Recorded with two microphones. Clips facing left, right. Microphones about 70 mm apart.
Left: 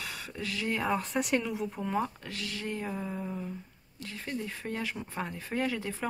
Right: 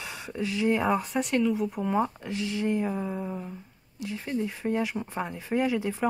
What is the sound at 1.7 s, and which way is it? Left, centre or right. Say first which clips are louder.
Speech: right 5 dB; centre.